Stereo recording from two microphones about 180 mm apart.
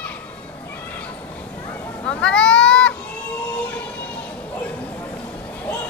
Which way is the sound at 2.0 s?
5° left (ahead or behind).